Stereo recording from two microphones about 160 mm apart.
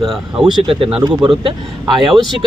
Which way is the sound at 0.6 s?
35° right (ahead or behind).